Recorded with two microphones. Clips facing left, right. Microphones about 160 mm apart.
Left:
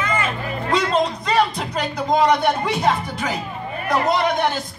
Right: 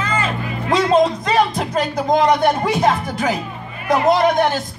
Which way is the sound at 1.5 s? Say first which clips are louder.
Right 5 dB; 50° right (ahead or behind).